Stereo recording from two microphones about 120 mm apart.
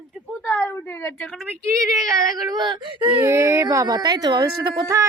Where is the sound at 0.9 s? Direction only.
20° left (ahead or behind).